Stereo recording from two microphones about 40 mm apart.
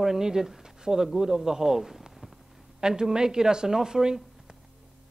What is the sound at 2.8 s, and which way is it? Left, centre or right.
A man's voice, centre.